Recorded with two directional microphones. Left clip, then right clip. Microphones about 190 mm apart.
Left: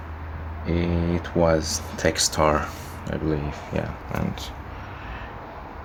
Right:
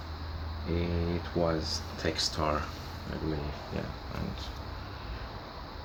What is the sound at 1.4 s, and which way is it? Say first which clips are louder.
Speech: left 11 dB; 50° left (ahead or behind).